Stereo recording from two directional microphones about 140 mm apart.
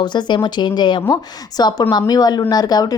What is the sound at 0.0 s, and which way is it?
A woman's voice, 30° left (ahead or behind).